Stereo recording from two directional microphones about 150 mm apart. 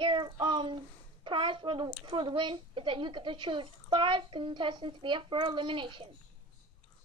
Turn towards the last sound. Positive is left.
turn(degrees=-35)  # may be behind; listen again after turning